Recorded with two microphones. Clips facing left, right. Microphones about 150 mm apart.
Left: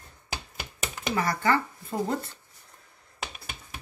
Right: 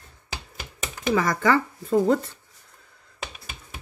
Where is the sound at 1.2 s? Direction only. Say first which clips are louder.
Right 2 dB; 90° right.